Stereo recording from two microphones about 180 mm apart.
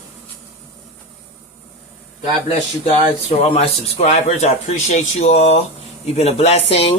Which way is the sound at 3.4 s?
35° left (ahead or behind).